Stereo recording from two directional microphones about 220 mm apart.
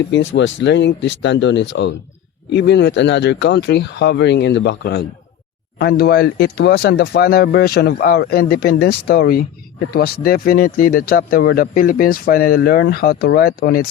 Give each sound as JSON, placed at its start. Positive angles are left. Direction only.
{"t": 0.1, "sound": "speech", "side_deg": 55}